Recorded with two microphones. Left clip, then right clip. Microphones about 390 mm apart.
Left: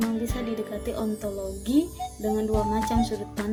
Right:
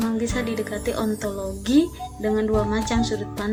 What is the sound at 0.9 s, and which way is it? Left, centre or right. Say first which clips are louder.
Speech: right 4 dB; left.